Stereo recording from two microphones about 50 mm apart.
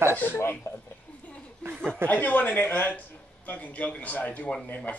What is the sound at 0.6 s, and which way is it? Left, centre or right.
Speech, left.